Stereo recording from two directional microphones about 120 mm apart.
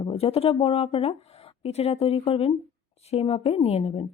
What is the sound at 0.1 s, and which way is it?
Speech, 55° left (ahead or behind).